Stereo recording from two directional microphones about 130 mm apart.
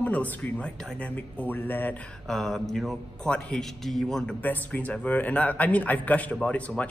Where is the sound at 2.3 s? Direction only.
5° left (ahead or behind).